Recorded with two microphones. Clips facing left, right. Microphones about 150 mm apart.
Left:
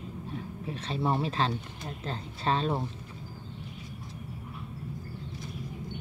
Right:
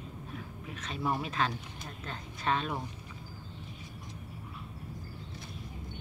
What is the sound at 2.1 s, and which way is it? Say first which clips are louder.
Speech: left 3 dB; 30° left (ahead or behind).